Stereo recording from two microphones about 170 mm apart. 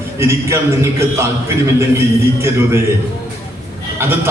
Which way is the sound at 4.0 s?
15° right (ahead or behind).